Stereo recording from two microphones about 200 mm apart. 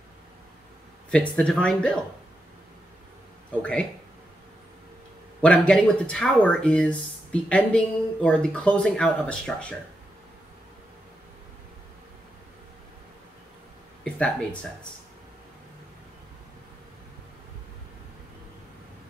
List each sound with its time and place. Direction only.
1.1 s speech: 5° left (ahead or behind)
5.4 s speech: 5° left (ahead or behind)
14.0 s speech: 5° left (ahead or behind)